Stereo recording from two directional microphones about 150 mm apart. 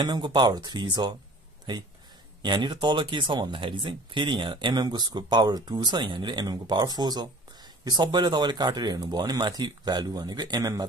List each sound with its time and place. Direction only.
0.0 s speech: 30° right (ahead or behind)
2.4 s speech: 30° right (ahead or behind)